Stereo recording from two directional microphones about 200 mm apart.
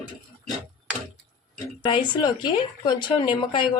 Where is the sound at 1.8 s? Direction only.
25° left (ahead or behind).